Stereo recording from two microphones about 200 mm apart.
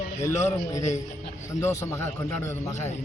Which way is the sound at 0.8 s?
35° left (ahead or behind).